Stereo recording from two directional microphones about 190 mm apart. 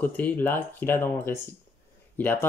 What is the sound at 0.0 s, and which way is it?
Speech, 10° left (ahead or behind).